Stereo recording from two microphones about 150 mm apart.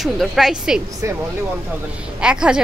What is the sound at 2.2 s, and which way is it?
Speech, 5° right (ahead or behind).